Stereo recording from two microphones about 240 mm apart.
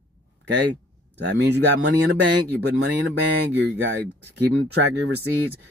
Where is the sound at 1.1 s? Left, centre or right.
Right.